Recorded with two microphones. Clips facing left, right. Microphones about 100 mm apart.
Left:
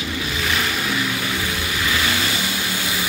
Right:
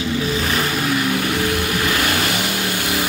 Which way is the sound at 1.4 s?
55° right (ahead or behind).